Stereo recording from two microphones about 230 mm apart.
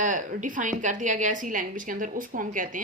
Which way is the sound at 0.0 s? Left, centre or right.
Right.